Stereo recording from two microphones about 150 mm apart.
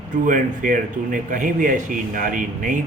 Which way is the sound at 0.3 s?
60° right (ahead or behind).